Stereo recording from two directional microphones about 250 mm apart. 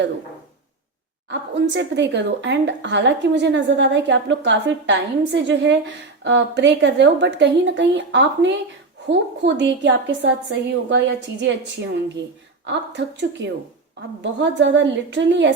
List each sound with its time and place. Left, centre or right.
1.3 s speech: right
12.6 s speech: right